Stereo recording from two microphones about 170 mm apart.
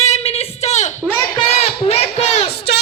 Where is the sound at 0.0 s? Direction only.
40° left (ahead or behind).